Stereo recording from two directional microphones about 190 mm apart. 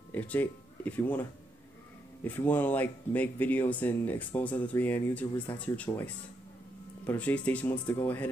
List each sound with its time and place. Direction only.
0.1 s speech: 10° left (ahead or behind)
2.2 s speech: 10° left (ahead or behind)
5.9 s speech: 20° left (ahead or behind)
7.1 s speech: 10° left (ahead or behind)